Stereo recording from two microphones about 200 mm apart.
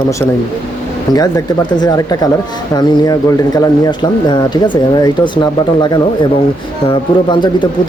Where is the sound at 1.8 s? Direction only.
20° left (ahead or behind).